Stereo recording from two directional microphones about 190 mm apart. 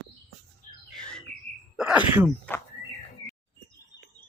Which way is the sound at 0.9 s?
5° left (ahead or behind).